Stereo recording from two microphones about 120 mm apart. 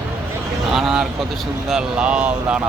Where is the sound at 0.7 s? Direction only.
5° right (ahead or behind).